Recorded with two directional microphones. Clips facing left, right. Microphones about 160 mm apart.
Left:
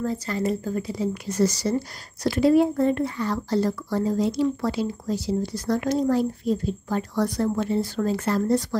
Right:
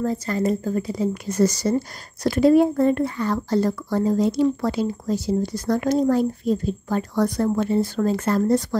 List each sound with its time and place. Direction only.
0.0 s speech: 45° right (ahead or behind)